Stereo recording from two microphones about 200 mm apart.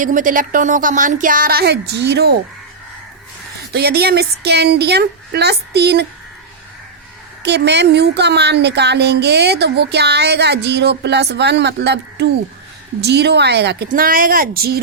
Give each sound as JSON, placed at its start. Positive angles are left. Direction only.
{"t": 0.0, "sound": "speech", "side_deg": -40}
{"t": 3.7, "sound": "speech", "side_deg": -50}
{"t": 7.4, "sound": "a woman's voice", "side_deg": -55}